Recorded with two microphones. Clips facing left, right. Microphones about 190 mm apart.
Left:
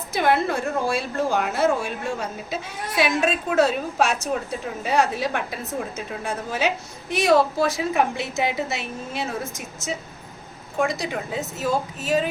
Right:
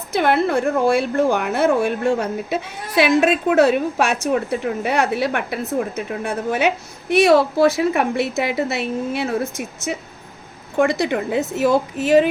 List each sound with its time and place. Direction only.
0.1 s a woman's voice: 60° right (ahead or behind)